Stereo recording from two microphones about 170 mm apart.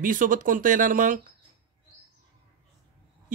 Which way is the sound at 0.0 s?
50° right (ahead or behind).